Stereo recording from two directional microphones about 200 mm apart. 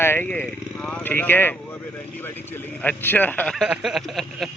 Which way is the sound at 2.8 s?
10° left (ahead or behind).